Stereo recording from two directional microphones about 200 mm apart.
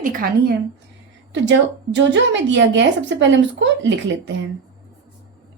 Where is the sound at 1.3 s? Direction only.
65° right (ahead or behind).